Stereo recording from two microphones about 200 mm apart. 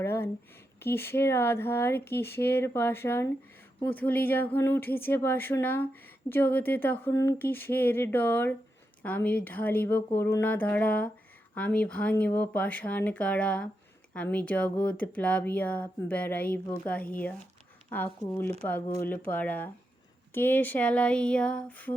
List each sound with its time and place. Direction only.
0.0 s speech: 10° left (ahead or behind)